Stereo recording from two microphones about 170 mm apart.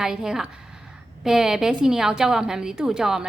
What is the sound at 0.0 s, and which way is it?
A woman's voice, 5° right (ahead or behind).